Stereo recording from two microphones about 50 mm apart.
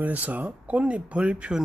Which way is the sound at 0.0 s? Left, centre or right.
Right.